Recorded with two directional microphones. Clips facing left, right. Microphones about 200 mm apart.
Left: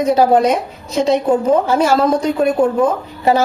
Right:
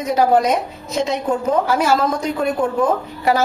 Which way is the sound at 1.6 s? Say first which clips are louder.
Left 4 dB; 30° left (ahead or behind).